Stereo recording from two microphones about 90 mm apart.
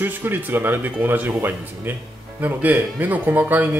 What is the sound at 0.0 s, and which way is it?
Speech, 25° right (ahead or behind).